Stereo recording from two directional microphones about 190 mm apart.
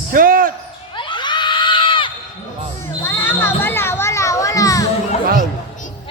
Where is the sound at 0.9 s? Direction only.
25° left (ahead or behind).